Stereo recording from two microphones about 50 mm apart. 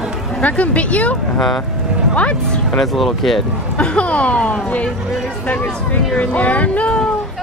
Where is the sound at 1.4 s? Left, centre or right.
Centre.